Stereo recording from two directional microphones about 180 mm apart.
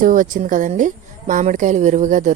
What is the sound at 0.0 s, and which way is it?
A woman's voice, 45° right (ahead or behind).